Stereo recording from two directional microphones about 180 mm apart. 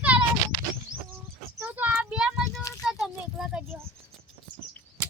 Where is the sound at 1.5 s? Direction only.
10° right (ahead or behind).